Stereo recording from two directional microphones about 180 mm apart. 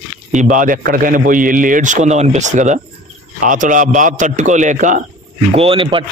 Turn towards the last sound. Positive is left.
turn(degrees=-30)  # may be behind; listen again after turning